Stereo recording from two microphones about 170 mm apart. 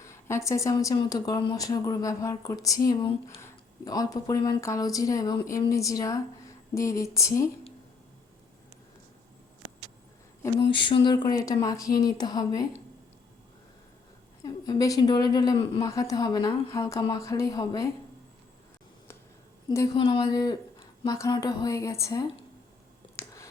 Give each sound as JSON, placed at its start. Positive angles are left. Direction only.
{"t": 0.0, "sound": "speech", "side_deg": 15}
{"t": 10.7, "sound": "speech", "side_deg": 30}
{"t": 14.4, "sound": "speech", "side_deg": 20}
{"t": 19.6, "sound": "a woman's voice", "side_deg": 25}